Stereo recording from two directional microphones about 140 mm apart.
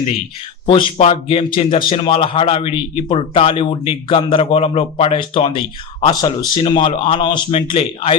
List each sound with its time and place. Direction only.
0.7 s a man's voice: 40° left (ahead or behind)